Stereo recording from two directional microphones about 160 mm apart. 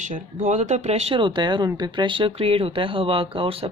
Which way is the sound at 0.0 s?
50° right (ahead or behind).